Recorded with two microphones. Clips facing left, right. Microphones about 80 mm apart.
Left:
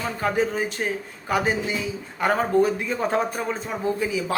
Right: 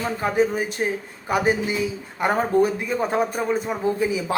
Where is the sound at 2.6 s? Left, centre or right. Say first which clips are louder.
Right 1 dB; centre.